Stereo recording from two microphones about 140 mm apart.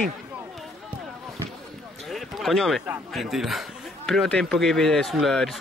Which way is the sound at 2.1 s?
Centre (ahead or behind).